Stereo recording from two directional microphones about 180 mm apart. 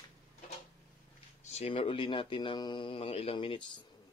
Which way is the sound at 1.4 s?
35° left (ahead or behind).